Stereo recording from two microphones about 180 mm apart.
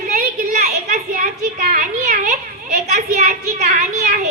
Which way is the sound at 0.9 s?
50° right (ahead or behind).